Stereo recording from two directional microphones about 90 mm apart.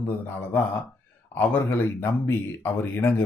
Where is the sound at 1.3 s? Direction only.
25° left (ahead or behind).